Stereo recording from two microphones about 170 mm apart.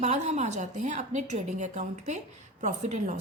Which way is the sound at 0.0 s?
40° right (ahead or behind).